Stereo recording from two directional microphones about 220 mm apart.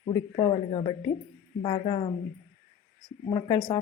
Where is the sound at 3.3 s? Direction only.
15° left (ahead or behind).